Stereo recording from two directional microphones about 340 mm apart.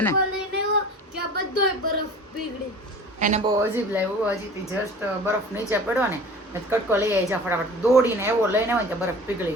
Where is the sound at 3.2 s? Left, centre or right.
Right.